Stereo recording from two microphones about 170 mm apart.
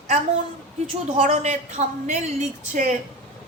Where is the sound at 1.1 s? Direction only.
45° right (ahead or behind).